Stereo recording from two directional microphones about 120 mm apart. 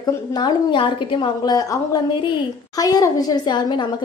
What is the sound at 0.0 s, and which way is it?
A woman's voice, 35° left (ahead or behind).